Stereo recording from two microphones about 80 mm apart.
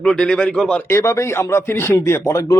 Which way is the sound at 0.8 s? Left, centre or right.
Left.